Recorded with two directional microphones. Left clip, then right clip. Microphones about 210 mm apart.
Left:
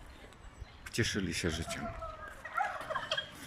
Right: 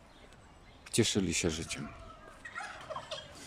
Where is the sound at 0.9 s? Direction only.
20° right (ahead or behind).